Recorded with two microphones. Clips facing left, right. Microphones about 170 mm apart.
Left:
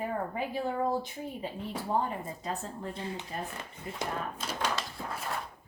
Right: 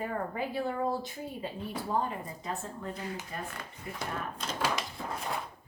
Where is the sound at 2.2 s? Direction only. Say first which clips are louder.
Left 1 dB; 30° left (ahead or behind).